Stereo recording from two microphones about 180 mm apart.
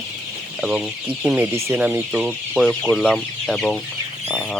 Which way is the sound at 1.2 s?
10° right (ahead or behind).